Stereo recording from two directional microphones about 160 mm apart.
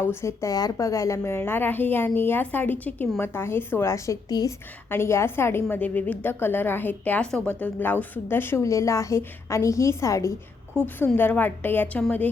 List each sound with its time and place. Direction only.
0.0 s a woman's voice: 15° left (ahead or behind)